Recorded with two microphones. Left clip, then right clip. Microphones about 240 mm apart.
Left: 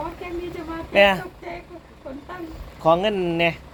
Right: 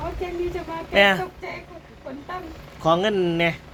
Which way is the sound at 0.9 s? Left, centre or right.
Centre.